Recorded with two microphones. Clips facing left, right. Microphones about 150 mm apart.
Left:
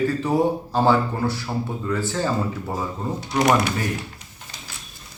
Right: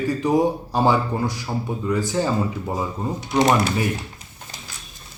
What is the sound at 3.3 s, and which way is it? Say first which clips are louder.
Speech: right 1 dB; 25° right (ahead or behind).